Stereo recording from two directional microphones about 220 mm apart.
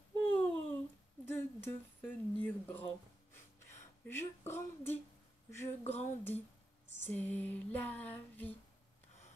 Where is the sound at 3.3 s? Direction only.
10° left (ahead or behind).